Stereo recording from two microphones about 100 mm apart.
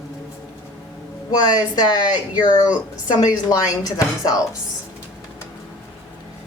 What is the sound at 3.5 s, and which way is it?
Speech, 35° left (ahead or behind).